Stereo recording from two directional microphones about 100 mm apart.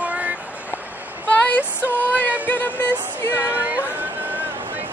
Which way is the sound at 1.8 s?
20° left (ahead or behind).